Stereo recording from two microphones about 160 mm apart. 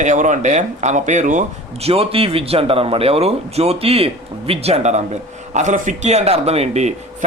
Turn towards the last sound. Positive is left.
turn(degrees=-45)  # may be behind; listen again after turning